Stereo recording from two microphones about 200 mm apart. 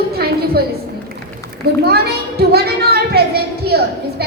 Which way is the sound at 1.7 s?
50° right (ahead or behind).